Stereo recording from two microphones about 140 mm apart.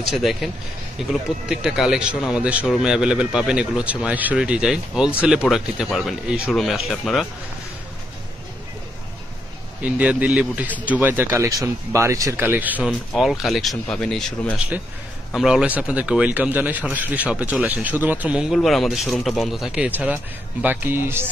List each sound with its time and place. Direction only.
0.1 s speech: centre (ahead or behind)
9.8 s a man's voice: 10° right (ahead or behind)
13.1 s a man's voice: centre (ahead or behind)